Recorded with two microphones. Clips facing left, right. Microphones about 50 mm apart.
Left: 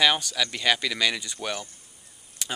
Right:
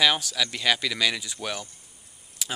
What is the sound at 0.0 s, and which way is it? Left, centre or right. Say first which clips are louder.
Speech: even; centre.